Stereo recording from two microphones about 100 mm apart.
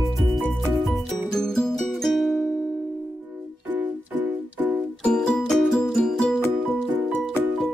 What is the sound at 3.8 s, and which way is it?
Music, 15° right (ahead or behind).